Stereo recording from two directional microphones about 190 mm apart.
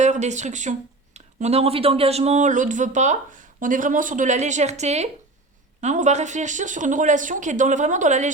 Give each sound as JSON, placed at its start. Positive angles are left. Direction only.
{"t": 0.0, "sound": "speech", "side_deg": -40}